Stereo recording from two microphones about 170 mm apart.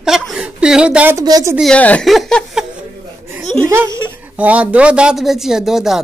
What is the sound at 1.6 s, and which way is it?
A woman's voice, 5° left (ahead or behind).